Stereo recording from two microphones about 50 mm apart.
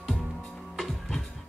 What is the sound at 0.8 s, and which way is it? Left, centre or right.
Music, centre.